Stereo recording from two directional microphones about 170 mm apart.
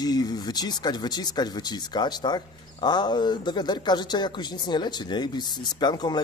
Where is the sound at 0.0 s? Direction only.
25° left (ahead or behind).